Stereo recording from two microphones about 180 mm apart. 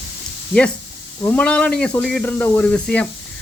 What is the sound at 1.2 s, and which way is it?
Speech, 5° left (ahead or behind).